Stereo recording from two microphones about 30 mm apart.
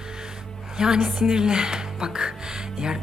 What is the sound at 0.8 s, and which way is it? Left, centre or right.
Speech, right.